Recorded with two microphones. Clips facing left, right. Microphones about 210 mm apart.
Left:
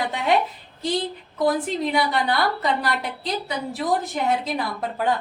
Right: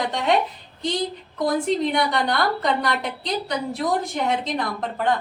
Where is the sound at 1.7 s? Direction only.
5° left (ahead or behind).